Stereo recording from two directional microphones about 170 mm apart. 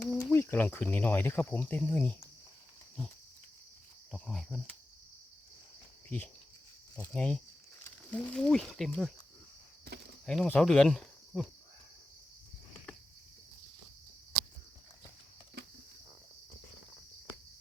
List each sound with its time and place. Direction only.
0.0 s cricket: 15° left (ahead or behind)
4.1 s speech: centre (ahead or behind)
6.1 s speech: 10° left (ahead or behind)
9.9 s a sound: 70° right (ahead or behind)
10.2 s speech: 5° left (ahead or behind)